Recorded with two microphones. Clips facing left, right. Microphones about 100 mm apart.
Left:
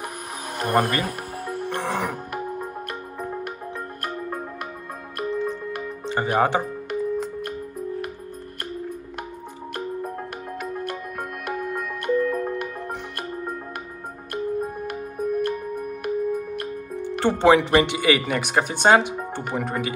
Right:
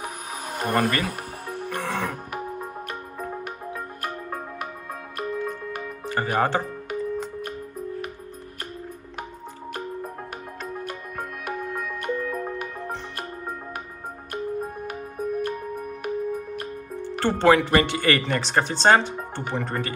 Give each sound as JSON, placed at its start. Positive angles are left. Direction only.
{"t": 0.6, "sound": "speech", "side_deg": 0}
{"t": 1.0, "sound": "music", "side_deg": 0}
{"t": 1.8, "sound": "speech", "side_deg": 15}
{"t": 5.3, "sound": "music", "side_deg": -5}
{"t": 6.0, "sound": "music", "side_deg": 20}
{"t": 6.3, "sound": "speech", "side_deg": 15}
{"t": 6.9, "sound": "music", "side_deg": 0}
{"t": 10.6, "sound": "music", "side_deg": 5}
{"t": 14.3, "sound": "music", "side_deg": 0}
{"t": 17.0, "sound": "speech", "side_deg": 15}